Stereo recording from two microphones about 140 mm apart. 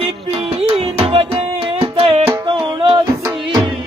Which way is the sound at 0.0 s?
40° right (ahead or behind).